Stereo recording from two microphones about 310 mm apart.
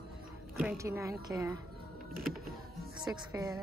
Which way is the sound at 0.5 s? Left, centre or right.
Centre.